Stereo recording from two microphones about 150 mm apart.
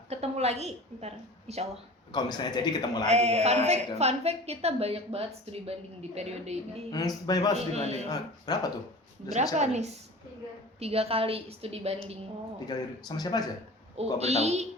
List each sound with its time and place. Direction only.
0.1 s a woman's voice: 45° right (ahead or behind)
2.1 s a man's voice: 30° left (ahead or behind)
3.1 s a woman's voice: 45° right (ahead or behind)
7.3 s a man's voice: 25° left (ahead or behind)
7.5 s a woman's voice: 45° right (ahead or behind)
8.1 s a man's voice: 25° left (ahead or behind)
9.6 s a woman's voice: 50° right (ahead or behind)
12.6 s a man's voice: 25° left (ahead or behind)
13.9 s a woman's voice: 45° right (ahead or behind)